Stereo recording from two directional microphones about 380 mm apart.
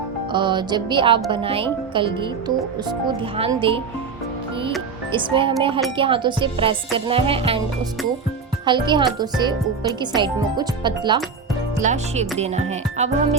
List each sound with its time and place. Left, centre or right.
0.3 s music: centre
5.1 s music: centre
8.6 s music: centre